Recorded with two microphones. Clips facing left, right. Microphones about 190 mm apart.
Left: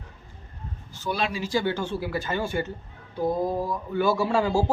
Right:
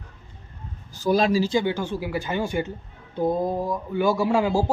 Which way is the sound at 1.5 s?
15° right (ahead or behind).